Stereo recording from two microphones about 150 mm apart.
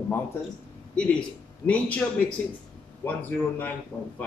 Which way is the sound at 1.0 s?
10° left (ahead or behind).